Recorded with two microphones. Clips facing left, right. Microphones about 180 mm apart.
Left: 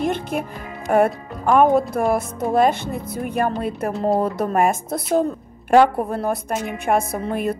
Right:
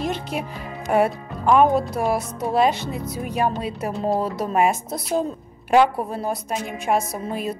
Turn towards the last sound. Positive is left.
turn(degrees=55)  # may be behind; listen again after turning